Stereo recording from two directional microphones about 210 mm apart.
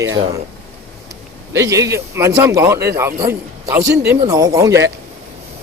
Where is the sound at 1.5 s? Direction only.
15° right (ahead or behind).